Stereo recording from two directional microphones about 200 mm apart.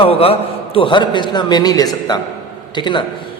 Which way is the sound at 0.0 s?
30° left (ahead or behind).